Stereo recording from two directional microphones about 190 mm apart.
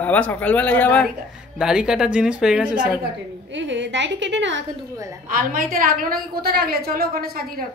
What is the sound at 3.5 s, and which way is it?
A woman's voice, 70° right (ahead or behind).